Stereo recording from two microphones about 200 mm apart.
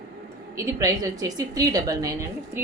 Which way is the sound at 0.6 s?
15° right (ahead or behind).